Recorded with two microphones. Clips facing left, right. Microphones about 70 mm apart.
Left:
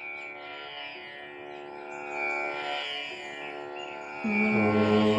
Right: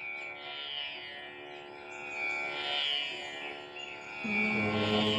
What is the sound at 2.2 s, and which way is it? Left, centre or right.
Music, left.